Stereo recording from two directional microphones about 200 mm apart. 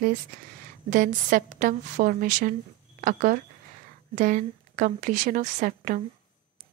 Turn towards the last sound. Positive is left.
turn(degrees=-40)  # may be behind; listen again after turning